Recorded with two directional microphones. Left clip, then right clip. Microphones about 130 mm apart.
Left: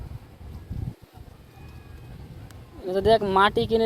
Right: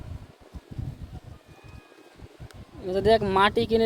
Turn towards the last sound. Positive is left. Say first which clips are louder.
# left 1 dB
turn(degrees=-20)  # may be behind; listen again after turning